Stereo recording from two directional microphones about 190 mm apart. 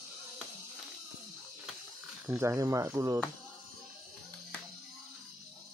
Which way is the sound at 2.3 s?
15° right (ahead or behind).